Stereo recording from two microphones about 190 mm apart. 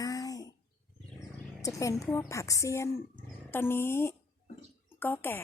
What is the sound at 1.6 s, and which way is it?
A woman's voice, 15° left (ahead or behind).